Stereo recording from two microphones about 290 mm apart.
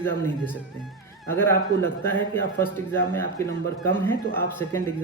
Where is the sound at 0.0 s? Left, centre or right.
Centre.